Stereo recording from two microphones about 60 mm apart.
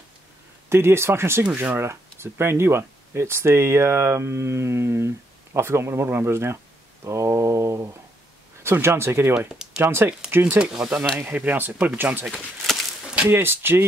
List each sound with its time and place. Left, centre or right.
0.7 s speech: right
9.5 s a sound: centre
9.8 s speech: right
10.3 s speech: right
10.6 s speech: centre
11.1 s speech: right
13.3 s speech: right